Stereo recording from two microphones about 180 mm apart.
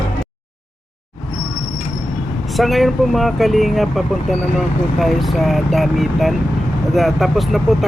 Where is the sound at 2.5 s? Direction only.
Centre (ahead or behind).